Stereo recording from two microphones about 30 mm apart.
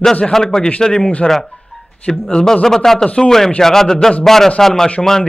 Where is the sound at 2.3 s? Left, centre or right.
Centre.